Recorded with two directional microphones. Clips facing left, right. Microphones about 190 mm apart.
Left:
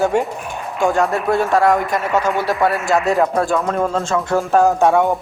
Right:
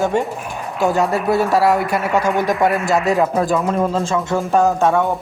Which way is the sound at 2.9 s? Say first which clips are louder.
Even; centre (ahead or behind).